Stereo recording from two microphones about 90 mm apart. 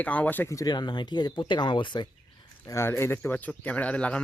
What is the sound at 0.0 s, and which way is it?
Speech, 15° left (ahead or behind).